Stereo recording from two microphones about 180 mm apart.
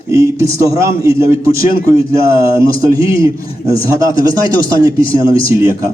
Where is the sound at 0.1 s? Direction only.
15° right (ahead or behind).